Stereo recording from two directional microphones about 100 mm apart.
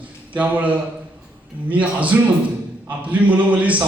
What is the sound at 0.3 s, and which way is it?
Speech, 15° right (ahead or behind).